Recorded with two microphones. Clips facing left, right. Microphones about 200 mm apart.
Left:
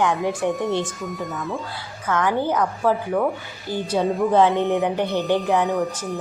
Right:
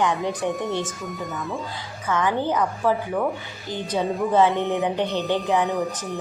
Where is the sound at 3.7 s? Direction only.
5° left (ahead or behind).